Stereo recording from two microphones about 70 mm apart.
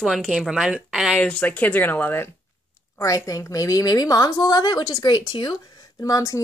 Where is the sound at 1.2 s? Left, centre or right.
Left.